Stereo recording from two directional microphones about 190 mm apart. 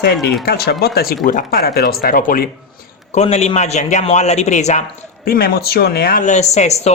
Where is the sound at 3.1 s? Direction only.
35° left (ahead or behind).